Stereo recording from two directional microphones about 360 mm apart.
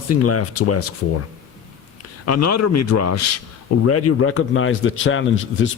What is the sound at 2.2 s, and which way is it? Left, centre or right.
A man's voice, left.